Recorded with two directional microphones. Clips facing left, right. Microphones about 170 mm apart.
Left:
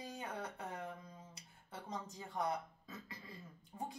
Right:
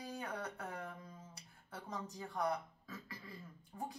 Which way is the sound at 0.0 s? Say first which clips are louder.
Right 1 dB; 20° left (ahead or behind).